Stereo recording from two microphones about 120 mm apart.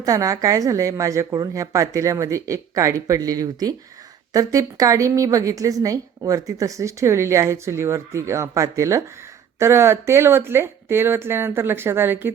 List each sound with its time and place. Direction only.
0.0 s a woman's voice: 30° right (ahead or behind)